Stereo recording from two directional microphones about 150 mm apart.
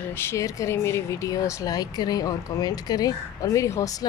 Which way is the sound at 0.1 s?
15° left (ahead or behind).